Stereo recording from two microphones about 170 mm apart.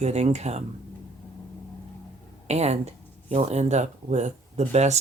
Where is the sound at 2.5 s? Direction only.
40° right (ahead or behind).